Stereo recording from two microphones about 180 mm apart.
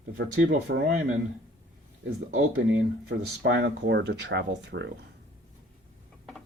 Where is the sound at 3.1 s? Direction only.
65° right (ahead or behind).